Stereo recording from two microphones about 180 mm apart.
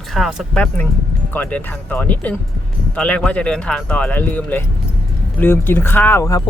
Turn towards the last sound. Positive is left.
turn(degrees=15)  # may be behind; listen again after turning